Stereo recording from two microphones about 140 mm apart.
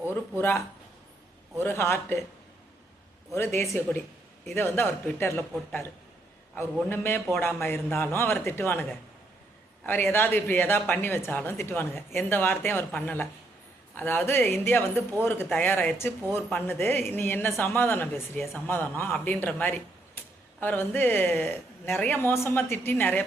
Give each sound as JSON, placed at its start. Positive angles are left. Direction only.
{"t": 0.1, "sound": "speech", "side_deg": 15}
{"t": 3.3, "sound": "speech", "side_deg": 20}
{"t": 6.8, "sound": "speech", "side_deg": 15}